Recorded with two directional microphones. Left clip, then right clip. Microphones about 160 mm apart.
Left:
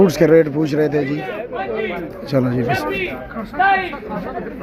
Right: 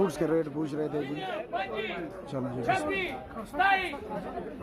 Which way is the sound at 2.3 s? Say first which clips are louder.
Left 17 dB; 15° left (ahead or behind).